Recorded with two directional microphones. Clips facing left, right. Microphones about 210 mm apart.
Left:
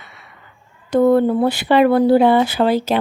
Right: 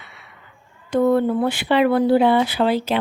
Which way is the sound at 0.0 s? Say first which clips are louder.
Left 2 dB; 45° left (ahead or behind).